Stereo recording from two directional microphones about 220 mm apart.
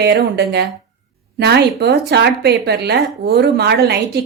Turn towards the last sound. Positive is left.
turn(degrees=-45)  # may be behind; listen again after turning